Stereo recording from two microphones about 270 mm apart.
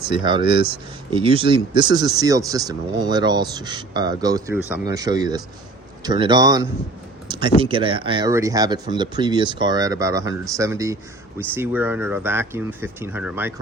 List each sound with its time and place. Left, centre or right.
0.1 s speech: centre
7.3 s a sound: centre
7.6 s speech: centre